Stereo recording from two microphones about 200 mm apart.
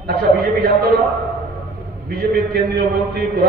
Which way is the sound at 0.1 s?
50° right (ahead or behind).